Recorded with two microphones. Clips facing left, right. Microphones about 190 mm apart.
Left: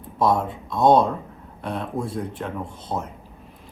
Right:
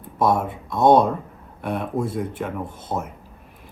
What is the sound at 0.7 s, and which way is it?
Speech, 20° right (ahead or behind).